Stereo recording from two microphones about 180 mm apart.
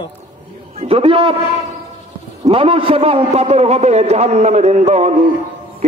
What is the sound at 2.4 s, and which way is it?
A man's voice, 30° right (ahead or behind).